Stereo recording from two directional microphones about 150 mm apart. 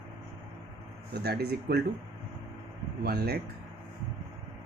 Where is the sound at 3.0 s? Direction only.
90° right.